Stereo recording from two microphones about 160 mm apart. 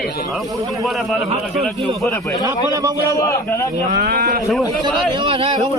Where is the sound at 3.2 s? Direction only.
20° left (ahead or behind).